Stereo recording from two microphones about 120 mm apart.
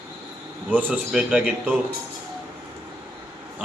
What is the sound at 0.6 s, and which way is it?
A man's voice, 15° right (ahead or behind).